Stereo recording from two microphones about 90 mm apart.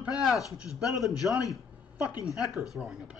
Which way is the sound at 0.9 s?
Centre (ahead or behind).